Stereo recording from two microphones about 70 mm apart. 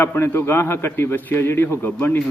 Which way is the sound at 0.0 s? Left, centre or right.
Left.